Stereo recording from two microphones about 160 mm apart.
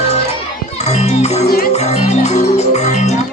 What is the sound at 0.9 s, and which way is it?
Music, 45° left (ahead or behind).